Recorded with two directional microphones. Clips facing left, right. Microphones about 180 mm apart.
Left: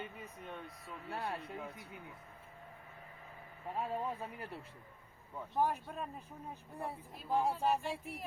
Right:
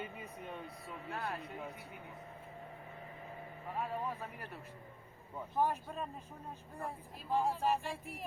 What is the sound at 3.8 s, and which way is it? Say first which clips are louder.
Speech: left 1 dB; 25° left (ahead or behind).